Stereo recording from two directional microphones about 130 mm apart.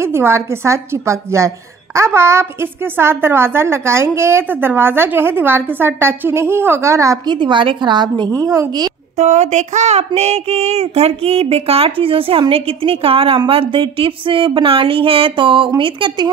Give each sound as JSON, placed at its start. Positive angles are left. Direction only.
{"t": 0.0, "sound": "a woman's voice", "side_deg": -20}
{"t": 7.3, "sound": "speech", "side_deg": -40}
{"t": 9.1, "sound": "speech", "side_deg": -60}